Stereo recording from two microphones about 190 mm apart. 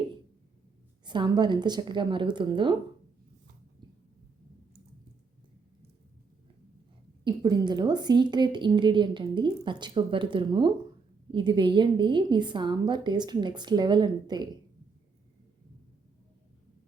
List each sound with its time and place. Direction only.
1.0 s a woman's voice: 25° right (ahead or behind)
7.3 s a woman's voice: 20° right (ahead or behind)